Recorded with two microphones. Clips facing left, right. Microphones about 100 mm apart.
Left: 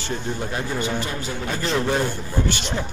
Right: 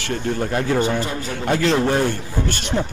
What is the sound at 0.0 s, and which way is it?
Speech, 70° right (ahead or behind).